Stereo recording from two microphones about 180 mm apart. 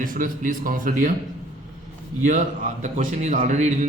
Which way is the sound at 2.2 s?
45° right (ahead or behind).